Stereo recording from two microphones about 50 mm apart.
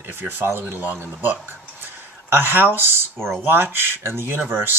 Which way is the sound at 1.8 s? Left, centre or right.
Right.